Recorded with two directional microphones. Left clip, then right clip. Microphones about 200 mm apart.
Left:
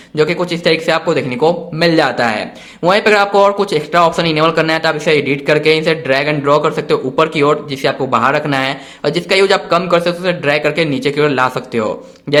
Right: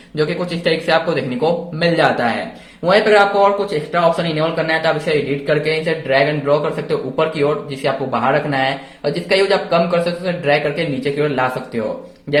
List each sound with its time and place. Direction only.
0.2 s a man's voice: 30° left (ahead or behind)